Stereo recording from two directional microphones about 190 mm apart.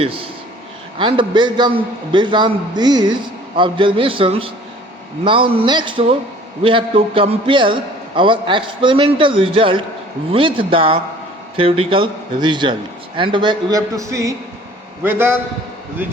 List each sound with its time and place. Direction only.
0.0 s a man's voice: 30° right (ahead or behind); by 15.4 s 10° right (ahead or behind)